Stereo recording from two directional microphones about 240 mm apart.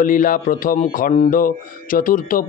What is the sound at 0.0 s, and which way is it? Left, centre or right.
A man's voice, left.